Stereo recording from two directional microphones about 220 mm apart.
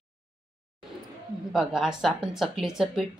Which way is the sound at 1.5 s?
Centre (ahead or behind).